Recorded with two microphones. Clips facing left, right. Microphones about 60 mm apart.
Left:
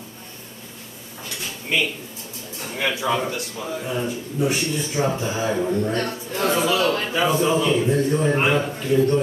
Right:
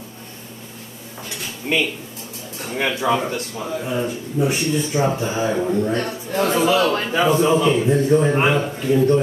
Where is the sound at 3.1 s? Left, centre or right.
Right.